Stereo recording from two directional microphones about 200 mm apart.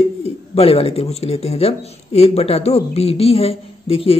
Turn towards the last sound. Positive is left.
turn(degrees=30)  # may be behind; listen again after turning